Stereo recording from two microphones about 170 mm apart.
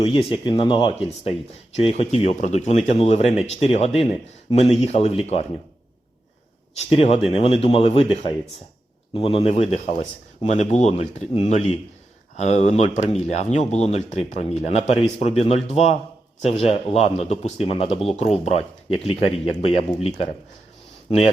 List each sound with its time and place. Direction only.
0.0 s speech: 30° left (ahead or behind)
6.7 s speech: 35° left (ahead or behind)
9.1 s speech: 35° left (ahead or behind)